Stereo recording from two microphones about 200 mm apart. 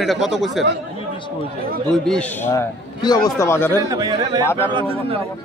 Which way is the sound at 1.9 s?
5° left (ahead or behind).